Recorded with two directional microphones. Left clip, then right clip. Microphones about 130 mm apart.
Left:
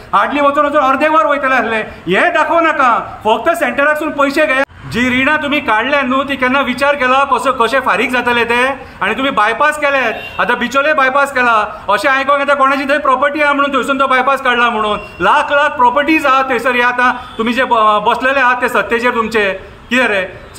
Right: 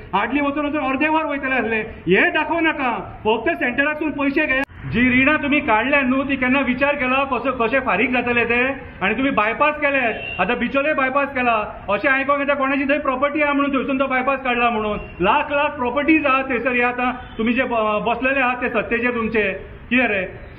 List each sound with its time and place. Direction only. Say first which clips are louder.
0.1 s a man's voice: left 9 dB; 35° left (ahead or behind)